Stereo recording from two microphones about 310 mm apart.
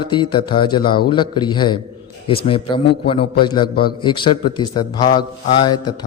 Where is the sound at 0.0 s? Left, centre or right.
Centre.